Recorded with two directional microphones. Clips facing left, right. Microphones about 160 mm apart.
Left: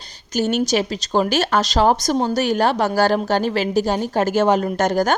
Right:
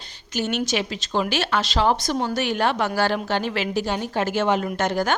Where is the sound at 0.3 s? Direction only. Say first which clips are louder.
Left 5 dB; 40° left (ahead or behind).